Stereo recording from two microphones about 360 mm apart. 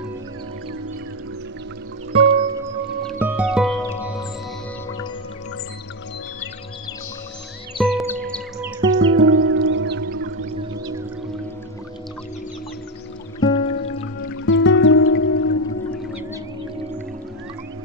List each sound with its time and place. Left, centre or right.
2.1 s music: centre
7.8 s music: centre
9.0 s music: right
13.4 s music: centre
14.2 s music: left